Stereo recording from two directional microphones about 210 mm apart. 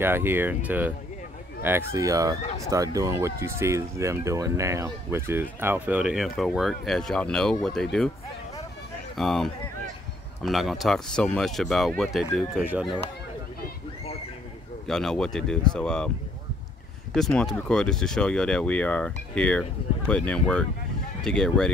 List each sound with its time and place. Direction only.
0.0 s speech: 10° right (ahead or behind)
9.1 s speech: centre (ahead or behind)
14.9 s speech: centre (ahead or behind)
17.1 s speech: 5° left (ahead or behind)